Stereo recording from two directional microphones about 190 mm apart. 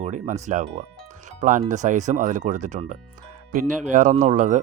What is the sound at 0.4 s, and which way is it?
Speech, 40° right (ahead or behind).